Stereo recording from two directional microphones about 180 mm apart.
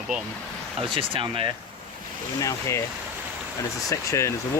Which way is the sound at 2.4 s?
20° left (ahead or behind).